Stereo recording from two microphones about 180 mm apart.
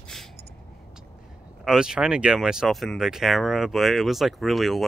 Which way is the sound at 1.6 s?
5° right (ahead or behind).